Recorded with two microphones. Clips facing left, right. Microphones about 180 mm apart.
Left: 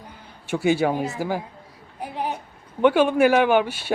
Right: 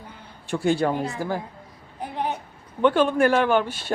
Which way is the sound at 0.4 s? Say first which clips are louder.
Left 1 dB; 5° left (ahead or behind).